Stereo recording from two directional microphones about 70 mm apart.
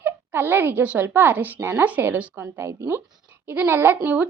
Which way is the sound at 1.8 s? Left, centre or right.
Right.